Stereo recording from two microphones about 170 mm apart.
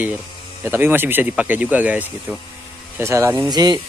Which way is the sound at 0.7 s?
10° right (ahead or behind).